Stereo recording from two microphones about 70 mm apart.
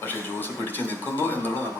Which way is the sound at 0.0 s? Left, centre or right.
Left.